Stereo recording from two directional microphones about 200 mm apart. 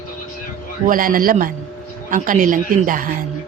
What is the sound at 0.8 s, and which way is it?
A woman's voice, 45° right (ahead or behind).